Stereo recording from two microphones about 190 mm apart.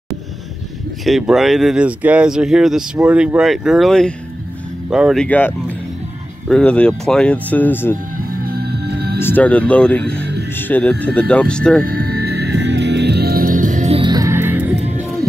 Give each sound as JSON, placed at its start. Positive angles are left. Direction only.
{"t": 1.0, "sound": "speech", "side_deg": 0}
{"t": 8.3, "sound": "music", "side_deg": -55}
{"t": 9.2, "sound": "speech", "side_deg": 10}
{"t": 11.8, "sound": "music", "side_deg": -50}
{"t": 13.9, "sound": "music", "side_deg": -20}